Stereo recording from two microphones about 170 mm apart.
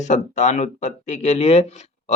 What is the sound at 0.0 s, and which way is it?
A man's voice, 45° left (ahead or behind).